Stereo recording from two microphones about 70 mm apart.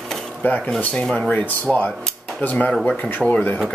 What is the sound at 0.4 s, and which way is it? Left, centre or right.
Speech, left.